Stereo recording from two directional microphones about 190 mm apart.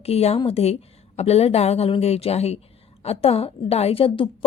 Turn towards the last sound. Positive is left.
turn(degrees=30)  # may be behind; listen again after turning